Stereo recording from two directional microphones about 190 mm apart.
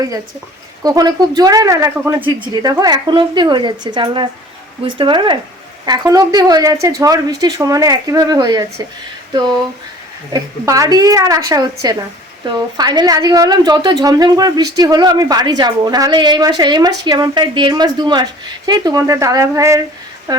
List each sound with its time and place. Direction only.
0.9 s speech: 20° right (ahead or behind)
10.3 s speech: 20° right (ahead or behind)